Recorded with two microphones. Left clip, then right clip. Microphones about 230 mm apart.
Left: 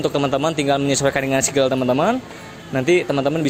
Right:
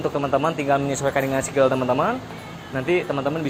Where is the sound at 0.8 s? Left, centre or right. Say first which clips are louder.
Left 3 dB; left.